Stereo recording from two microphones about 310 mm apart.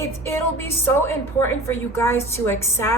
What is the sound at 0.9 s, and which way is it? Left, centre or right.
A woman's voice, centre.